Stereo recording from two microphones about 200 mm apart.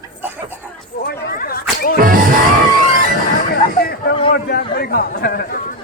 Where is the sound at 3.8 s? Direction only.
50° left (ahead or behind).